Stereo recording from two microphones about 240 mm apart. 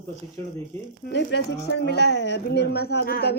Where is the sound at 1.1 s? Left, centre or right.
Left.